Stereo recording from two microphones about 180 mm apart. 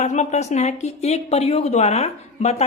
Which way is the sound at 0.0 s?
40° left (ahead or behind).